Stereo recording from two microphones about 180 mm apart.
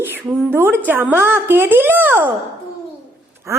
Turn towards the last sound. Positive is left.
turn(degrees=-15)  # may be behind; listen again after turning